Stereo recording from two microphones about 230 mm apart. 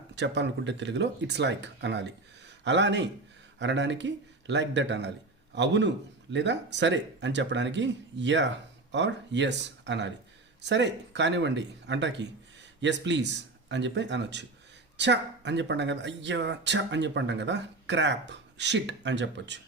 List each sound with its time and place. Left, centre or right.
0.2 s speech: right